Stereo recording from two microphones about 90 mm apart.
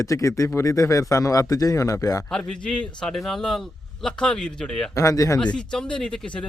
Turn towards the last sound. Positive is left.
turn(degrees=10)  # may be behind; listen again after turning